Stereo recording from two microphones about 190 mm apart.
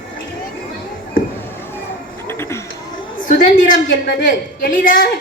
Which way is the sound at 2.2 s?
15° left (ahead or behind).